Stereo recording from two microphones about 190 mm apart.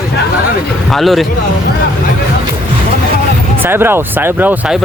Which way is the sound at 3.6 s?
10° right (ahead or behind).